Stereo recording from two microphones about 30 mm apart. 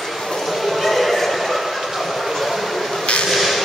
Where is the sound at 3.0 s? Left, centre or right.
Left.